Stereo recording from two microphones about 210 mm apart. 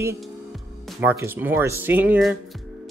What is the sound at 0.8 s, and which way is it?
Speech, 10° right (ahead or behind).